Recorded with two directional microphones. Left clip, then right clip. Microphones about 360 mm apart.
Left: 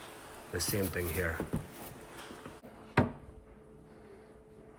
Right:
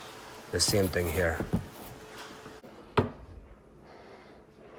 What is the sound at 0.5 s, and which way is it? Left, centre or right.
Speech, centre.